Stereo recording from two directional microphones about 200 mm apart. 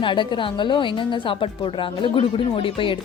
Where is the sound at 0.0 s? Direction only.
25° left (ahead or behind).